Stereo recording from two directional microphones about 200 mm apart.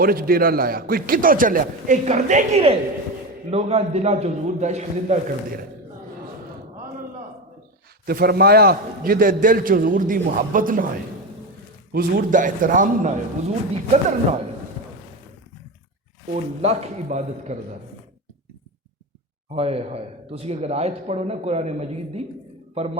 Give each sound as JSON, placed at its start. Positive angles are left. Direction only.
{"t": 0.0, "sound": "a man's voice", "side_deg": -45}
{"t": 8.0, "sound": "a man's voice", "side_deg": -50}
{"t": 11.9, "sound": "speech", "side_deg": -45}
{"t": 16.3, "sound": "speech", "side_deg": -30}
{"t": 19.5, "sound": "speech", "side_deg": -30}